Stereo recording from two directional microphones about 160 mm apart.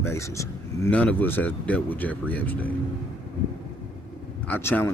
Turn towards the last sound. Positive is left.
turn(degrees=15)  # may be behind; listen again after turning